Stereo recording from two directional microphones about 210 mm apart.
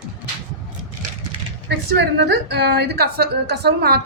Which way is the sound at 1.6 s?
50° right (ahead or behind).